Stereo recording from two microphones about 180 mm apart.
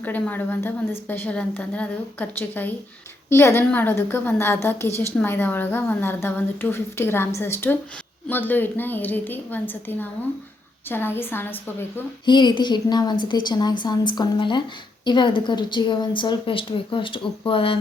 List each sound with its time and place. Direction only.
0.0 s a woman's voice: 10° left (ahead or behind)
12.2 s a woman's voice: 25° left (ahead or behind)